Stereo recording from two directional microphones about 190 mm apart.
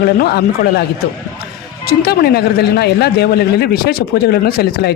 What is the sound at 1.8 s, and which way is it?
Speech, 55° left (ahead or behind).